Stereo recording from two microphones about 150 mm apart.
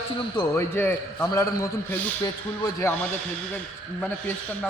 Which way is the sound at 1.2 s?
25° left (ahead or behind).